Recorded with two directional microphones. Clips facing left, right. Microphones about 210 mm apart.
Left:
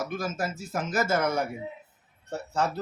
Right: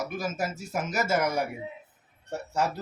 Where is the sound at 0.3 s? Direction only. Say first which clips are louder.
Even; 10° right (ahead or behind).